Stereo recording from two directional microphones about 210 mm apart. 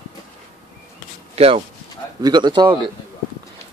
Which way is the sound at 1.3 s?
30° right (ahead or behind).